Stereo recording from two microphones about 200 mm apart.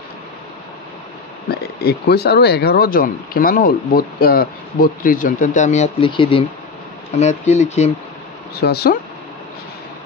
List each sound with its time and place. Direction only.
1.5 s speech: 50° left (ahead or behind); by 7.9 s 35° left (ahead or behind)
8.5 s speech: 50° left (ahead or behind)